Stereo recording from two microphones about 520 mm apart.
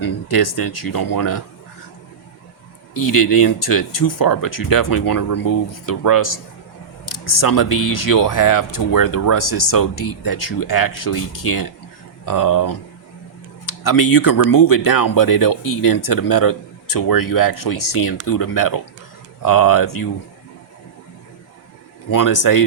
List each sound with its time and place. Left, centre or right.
0.0 s speech: left
3.1 s speech: left
22.1 s speech: left